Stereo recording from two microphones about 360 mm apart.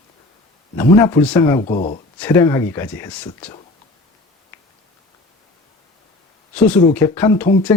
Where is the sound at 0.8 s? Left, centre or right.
Centre.